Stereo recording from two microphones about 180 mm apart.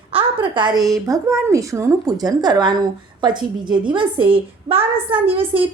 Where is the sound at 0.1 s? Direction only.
30° right (ahead or behind).